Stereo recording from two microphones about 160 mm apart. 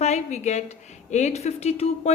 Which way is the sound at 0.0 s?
45° left (ahead or behind).